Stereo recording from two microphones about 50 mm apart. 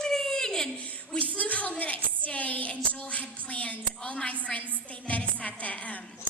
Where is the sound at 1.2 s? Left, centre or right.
Left.